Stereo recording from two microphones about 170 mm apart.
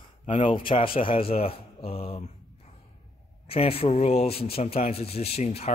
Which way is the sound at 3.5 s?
35° left (ahead or behind).